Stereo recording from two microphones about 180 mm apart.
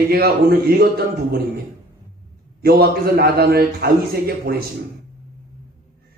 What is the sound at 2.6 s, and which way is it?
A man's voice, 60° right (ahead or behind).